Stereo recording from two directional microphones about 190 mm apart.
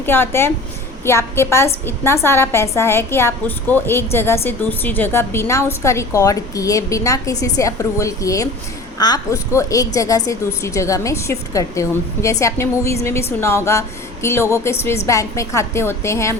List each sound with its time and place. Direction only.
0.0 s a woman's voice: 10° left (ahead or behind)